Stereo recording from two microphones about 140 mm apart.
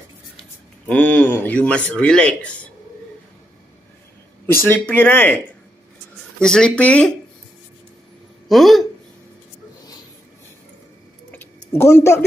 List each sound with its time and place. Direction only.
0.8 s speech: 10° left (ahead or behind)
4.5 s speech: 15° left (ahead or behind)
6.4 s speech: 5° left (ahead or behind)
8.5 s speech: centre (ahead or behind)
11.3 s tick-tock: 15° left (ahead or behind)